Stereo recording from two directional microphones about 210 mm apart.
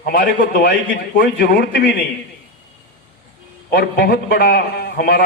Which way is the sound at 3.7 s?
45° left (ahead or behind).